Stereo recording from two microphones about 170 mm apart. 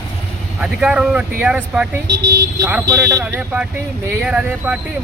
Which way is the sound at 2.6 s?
10° right (ahead or behind).